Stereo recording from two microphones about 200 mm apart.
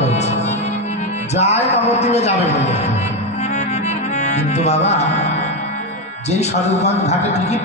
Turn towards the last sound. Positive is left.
turn(degrees=35)  # may be behind; listen again after turning